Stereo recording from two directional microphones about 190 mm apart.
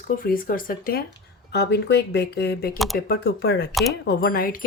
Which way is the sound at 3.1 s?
60° left (ahead or behind).